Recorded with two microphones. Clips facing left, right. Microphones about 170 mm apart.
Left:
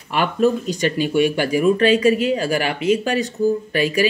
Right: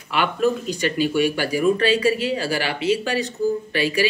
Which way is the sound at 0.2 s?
40° left (ahead or behind).